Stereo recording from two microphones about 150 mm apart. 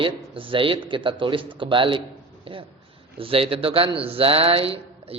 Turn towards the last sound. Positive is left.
turn(degrees=-40)  # may be behind; listen again after turning